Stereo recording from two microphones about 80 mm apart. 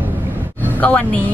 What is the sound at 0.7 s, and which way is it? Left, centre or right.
Speech, left.